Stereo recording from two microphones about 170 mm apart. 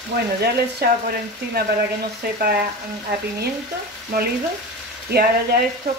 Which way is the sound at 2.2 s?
65° right (ahead or behind).